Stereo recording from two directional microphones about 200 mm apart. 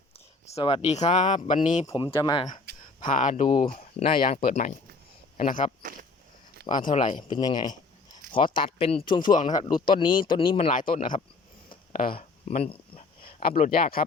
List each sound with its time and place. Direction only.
0.5 s speech: 25° left (ahead or behind)
1.9 s speech: 25° left (ahead or behind)
2.7 s a sound: 55° right (ahead or behind)
3.1 s speech: 40° left (ahead or behind)
4.1 s speech: 45° left (ahead or behind)
7.0 s speech: 25° left (ahead or behind)
9.3 s speech: 40° left (ahead or behind)
9.6 s speech: 25° left (ahead or behind)
10.7 s speech: 40° left (ahead or behind)
12.5 s speech: 30° left (ahead or behind)
13.2 s speech: 45° left (ahead or behind)